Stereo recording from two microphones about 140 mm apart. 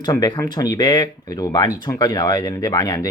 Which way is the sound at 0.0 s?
30° left (ahead or behind).